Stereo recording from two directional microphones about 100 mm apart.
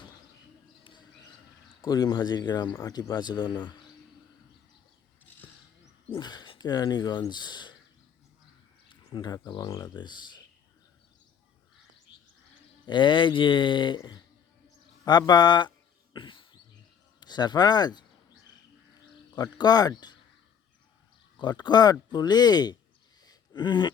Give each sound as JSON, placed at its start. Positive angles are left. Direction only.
{"t": 1.8, "sound": "speech", "side_deg": 40}
{"t": 5.4, "sound": "a sound", "side_deg": 15}
{"t": 6.1, "sound": "speech", "side_deg": 45}
{"t": 8.9, "sound": "speech", "side_deg": 45}
{"t": 12.8, "sound": "speech", "side_deg": 50}
{"t": 16.1, "sound": "a sound", "side_deg": 55}
{"t": 17.2, "sound": "speech", "side_deg": 45}
{"t": 19.4, "sound": "speech", "side_deg": 45}
{"t": 21.3, "sound": "speech", "side_deg": 45}
{"t": 23.2, "sound": "a sound", "side_deg": 40}